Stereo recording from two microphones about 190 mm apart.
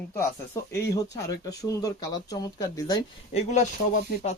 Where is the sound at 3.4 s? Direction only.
40° left (ahead or behind).